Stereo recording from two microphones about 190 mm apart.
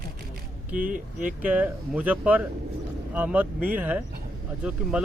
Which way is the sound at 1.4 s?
10° right (ahead or behind).